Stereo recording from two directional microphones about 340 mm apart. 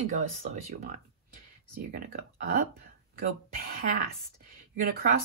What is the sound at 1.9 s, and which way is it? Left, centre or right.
A woman's voice, right.